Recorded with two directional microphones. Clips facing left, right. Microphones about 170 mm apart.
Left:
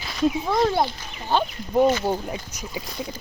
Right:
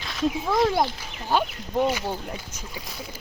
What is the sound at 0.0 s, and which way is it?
Speech, 5° left (ahead or behind).